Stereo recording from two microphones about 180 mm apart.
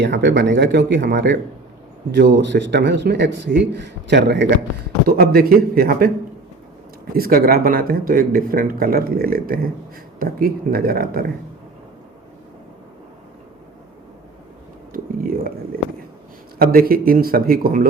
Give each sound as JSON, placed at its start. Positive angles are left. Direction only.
{"t": 0.0, "sound": "a man's voice", "side_deg": -75}
{"t": 5.0, "sound": "speech", "side_deg": -55}
{"t": 7.2, "sound": "speech", "side_deg": -55}
{"t": 16.6, "sound": "speech", "side_deg": -55}